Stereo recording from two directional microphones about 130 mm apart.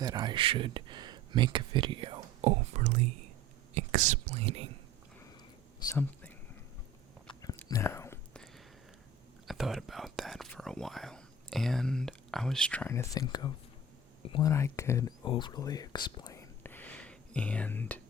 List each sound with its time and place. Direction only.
0.0 s speech: 35° right (ahead or behind)
2.4 s speech: 60° right (ahead or behind)
5.9 s speech: 15° left (ahead or behind)
7.8 s whispering: 20° left (ahead or behind)
8.3 s a sound: 5° left (ahead or behind)
9.5 s speech: centre (ahead or behind)
12.9 s speech: 20° left (ahead or behind)
13.2 s speech: 35° left (ahead or behind)
14.4 s speech: 20° left (ahead or behind)
15.2 s speech: 35° left (ahead or behind)
16.3 s whispering: 15° left (ahead or behind)